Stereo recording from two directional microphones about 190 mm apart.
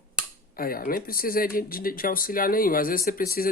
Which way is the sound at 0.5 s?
50° left (ahead or behind).